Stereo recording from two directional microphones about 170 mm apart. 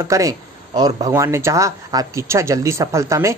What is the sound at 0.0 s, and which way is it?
Speech, 20° right (ahead or behind).